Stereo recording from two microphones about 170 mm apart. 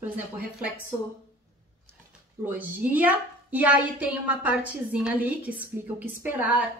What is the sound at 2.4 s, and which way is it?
A woman's voice, 10° right (ahead or behind).